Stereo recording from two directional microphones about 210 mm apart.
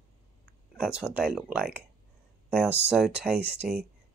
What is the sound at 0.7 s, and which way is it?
Speech, 5° right (ahead or behind).